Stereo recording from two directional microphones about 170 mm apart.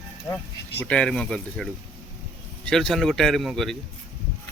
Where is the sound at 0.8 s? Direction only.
5° left (ahead or behind).